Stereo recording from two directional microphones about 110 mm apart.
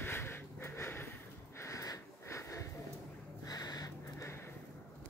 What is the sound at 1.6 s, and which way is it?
Wheeze, 30° left (ahead or behind).